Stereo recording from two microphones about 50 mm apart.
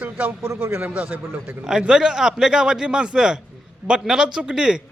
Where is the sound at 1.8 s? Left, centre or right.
Centre.